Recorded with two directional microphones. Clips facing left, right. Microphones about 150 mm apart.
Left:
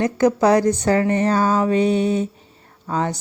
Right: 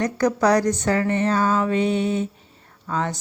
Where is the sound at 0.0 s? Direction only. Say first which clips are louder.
Left 3 dB; 25° left (ahead or behind).